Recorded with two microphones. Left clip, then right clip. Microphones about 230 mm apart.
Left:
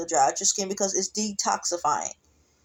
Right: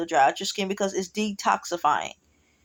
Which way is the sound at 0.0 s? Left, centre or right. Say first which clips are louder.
Right 1 dB; right.